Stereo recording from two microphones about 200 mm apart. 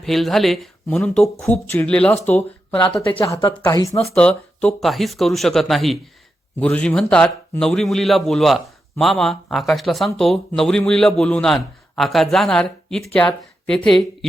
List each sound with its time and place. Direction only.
0.0 s a man's voice: centre (ahead or behind)
3.2 s a woman's voice: 15° left (ahead or behind)
4.1 s a man's voice: 5° left (ahead or behind)